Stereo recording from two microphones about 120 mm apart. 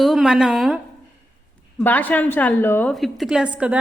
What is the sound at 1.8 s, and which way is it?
A woman's voice, 15° left (ahead or behind).